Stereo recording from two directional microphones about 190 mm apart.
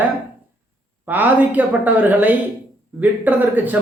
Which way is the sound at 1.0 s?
10° right (ahead or behind).